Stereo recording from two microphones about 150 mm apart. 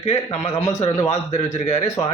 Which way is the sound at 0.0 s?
45° left (ahead or behind).